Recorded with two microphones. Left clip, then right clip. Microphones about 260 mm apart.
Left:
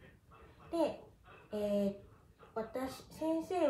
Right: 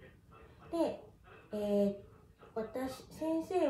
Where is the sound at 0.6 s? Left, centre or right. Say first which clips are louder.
Even; centre.